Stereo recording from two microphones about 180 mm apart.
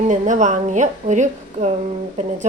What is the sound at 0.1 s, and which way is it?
A woman's voice, 45° right (ahead or behind).